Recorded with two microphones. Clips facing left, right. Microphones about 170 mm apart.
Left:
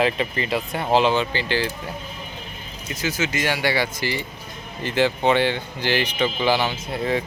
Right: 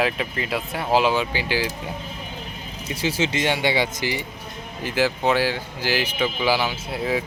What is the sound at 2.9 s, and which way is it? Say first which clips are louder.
Speech: right 2 dB; 30° right (ahead or behind).